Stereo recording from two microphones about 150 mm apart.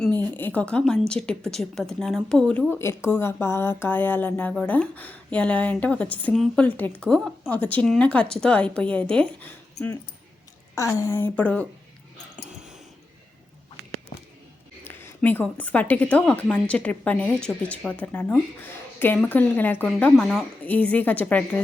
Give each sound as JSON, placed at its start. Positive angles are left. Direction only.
{"t": 0.0, "sound": "a woman's voice", "side_deg": 10}
{"t": 10.8, "sound": "a woman's voice", "side_deg": 20}
{"t": 14.8, "sound": "a woman's voice", "side_deg": 15}